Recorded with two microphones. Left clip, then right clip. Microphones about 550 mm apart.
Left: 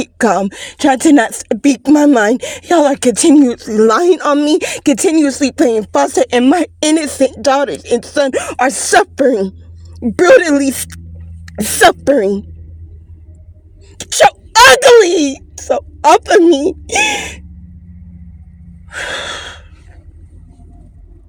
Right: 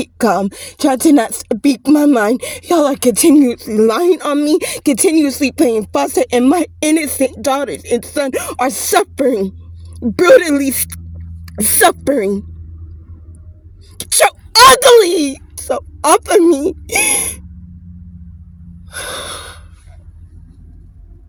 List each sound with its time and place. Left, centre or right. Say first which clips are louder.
0.2 s speech: left 2 dB; right
14.0 s wail: left 3 dB; right
14.8 s speech: left 1 dB; right